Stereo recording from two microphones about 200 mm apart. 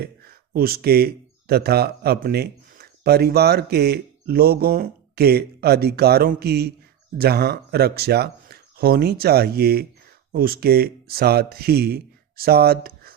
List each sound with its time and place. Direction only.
0.0 s speech: 50° right (ahead or behind)